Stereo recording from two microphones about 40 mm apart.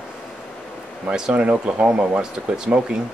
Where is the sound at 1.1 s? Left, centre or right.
Right.